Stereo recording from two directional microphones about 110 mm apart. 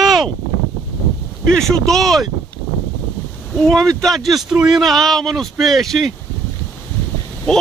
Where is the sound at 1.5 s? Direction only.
5° left (ahead or behind).